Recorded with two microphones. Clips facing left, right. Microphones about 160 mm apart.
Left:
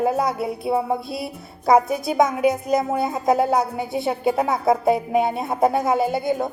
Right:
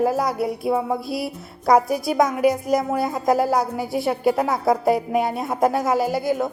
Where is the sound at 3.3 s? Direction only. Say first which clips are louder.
Left 1 dB; 25° left (ahead or behind).